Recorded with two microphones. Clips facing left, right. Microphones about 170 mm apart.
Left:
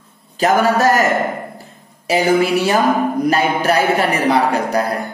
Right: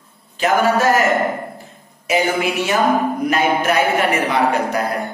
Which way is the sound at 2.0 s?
35° left (ahead or behind).